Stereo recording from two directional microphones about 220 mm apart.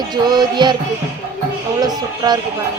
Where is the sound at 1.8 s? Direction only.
20° right (ahead or behind).